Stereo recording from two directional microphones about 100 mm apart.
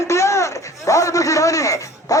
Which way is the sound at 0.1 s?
30° left (ahead or behind).